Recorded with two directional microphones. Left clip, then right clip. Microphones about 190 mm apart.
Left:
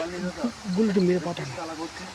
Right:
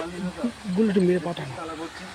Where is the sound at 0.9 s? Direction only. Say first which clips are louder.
Right 1 dB; 10° right (ahead or behind).